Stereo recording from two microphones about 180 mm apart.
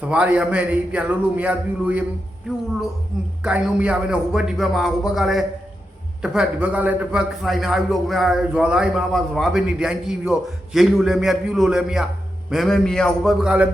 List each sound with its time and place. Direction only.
0.0 s a man's voice: 5° right (ahead or behind)